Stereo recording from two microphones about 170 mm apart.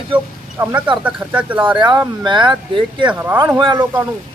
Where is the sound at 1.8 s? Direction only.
25° right (ahead or behind).